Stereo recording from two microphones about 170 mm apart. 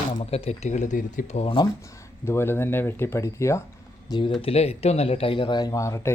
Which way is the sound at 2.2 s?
15° left (ahead or behind).